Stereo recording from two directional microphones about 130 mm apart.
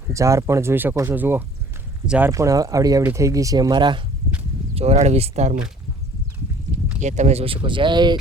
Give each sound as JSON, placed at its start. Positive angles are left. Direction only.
{"t": 0.1, "sound": "speech", "side_deg": -25}
{"t": 2.3, "sound": "speech", "side_deg": -25}
{"t": 4.7, "sound": "speech", "side_deg": -55}
{"t": 7.0, "sound": "speech", "side_deg": -65}